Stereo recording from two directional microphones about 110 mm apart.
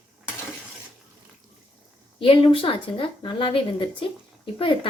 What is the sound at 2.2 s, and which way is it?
A woman's voice, 55° left (ahead or behind).